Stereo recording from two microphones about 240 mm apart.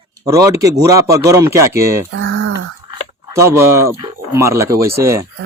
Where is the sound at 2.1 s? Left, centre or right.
Right.